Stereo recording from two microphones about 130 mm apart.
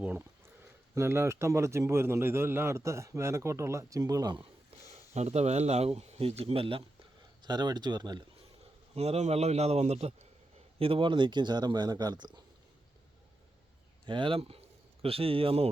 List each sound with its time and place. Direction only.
0.0 s a man's voice: 10° right (ahead or behind); by 4.4 s 30° right (ahead or behind)
4.9 s speech: 55° right (ahead or behind)
7.4 s speech: 35° right (ahead or behind)
9.0 s speech: 55° right (ahead or behind)
10.8 s speech: 45° right (ahead or behind)
14.1 s a man's voice: 40° right (ahead or behind)